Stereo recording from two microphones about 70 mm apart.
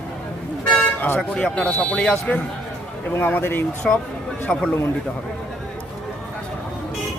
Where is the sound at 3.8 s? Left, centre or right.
Centre.